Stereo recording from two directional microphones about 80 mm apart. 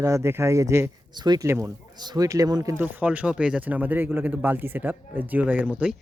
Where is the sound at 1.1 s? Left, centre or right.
Right.